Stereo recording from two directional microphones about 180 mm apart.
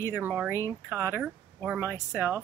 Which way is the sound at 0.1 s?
10° right (ahead or behind).